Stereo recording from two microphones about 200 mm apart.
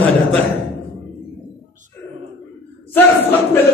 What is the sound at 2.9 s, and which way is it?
Speech, 10° left (ahead or behind).